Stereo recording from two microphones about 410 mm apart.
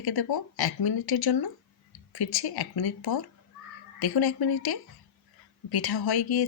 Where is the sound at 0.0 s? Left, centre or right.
Left.